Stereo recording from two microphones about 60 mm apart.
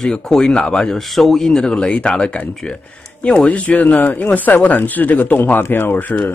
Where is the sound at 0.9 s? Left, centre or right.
Centre; by 6.3 s left.